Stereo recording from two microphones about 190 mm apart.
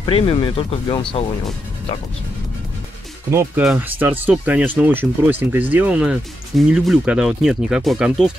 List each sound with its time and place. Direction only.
0.0 s speech: 30° left (ahead or behind)
3.3 s speech: 15° right (ahead or behind)